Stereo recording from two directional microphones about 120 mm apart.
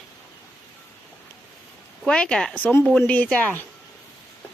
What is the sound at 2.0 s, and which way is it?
Speech, 5° left (ahead or behind).